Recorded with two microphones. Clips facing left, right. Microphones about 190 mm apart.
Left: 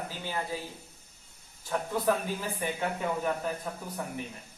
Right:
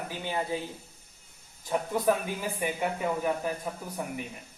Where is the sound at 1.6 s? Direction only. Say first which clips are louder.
Right 2 dB; 15° right (ahead or behind).